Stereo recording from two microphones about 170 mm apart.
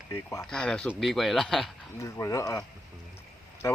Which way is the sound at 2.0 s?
15° left (ahead or behind).